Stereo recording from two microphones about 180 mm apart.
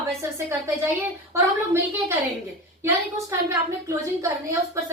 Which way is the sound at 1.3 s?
15° right (ahead or behind).